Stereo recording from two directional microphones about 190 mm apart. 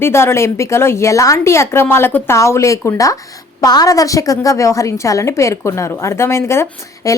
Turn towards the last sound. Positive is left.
turn(degrees=15)  # may be behind; listen again after turning